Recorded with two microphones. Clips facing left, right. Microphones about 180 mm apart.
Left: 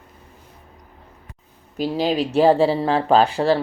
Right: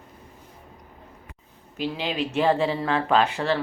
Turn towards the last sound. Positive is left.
turn(degrees=35)  # may be behind; listen again after turning